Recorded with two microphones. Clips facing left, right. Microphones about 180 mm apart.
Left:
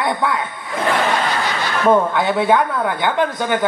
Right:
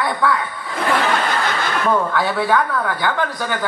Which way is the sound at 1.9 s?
20° left (ahead or behind).